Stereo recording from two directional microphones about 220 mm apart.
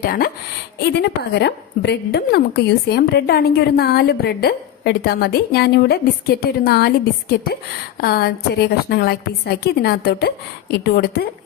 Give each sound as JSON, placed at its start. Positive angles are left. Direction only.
{"t": 0.0, "sound": "a woman's voice", "side_deg": 45}